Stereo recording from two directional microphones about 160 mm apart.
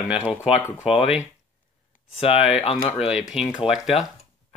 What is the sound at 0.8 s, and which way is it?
Speech, 40° left (ahead or behind).